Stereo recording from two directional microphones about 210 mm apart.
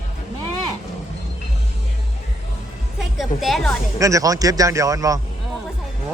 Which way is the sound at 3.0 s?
Centre (ahead or behind).